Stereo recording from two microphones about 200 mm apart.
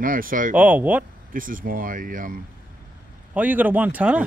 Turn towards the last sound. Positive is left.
turn(degrees=-5)  # may be behind; listen again after turning